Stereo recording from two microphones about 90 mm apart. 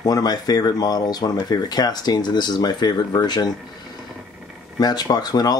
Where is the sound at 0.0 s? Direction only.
45° left (ahead or behind).